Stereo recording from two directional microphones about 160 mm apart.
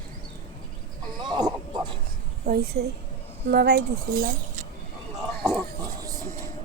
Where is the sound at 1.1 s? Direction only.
25° right (ahead or behind).